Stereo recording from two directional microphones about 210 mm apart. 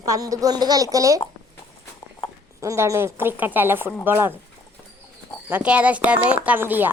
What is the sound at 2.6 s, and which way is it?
Speech, 15° right (ahead or behind).